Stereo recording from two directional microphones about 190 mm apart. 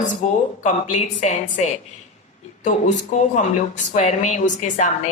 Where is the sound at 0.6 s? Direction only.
35° left (ahead or behind).